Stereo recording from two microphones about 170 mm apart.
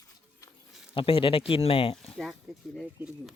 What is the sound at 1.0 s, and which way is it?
Speech, 30° left (ahead or behind).